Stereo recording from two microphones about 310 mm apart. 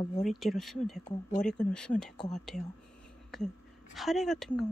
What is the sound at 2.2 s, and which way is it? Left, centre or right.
Speech, left.